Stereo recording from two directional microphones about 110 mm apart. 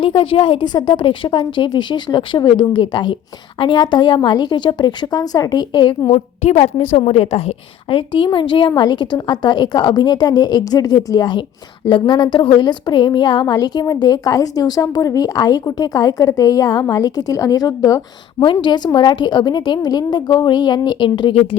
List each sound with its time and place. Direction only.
0.0 s a woman's voice: 55° left (ahead or behind)
6.1 s a woman's voice: 85° left; by 18.0 s 35° left (ahead or behind)
18.3 s a woman's voice: 45° left (ahead or behind)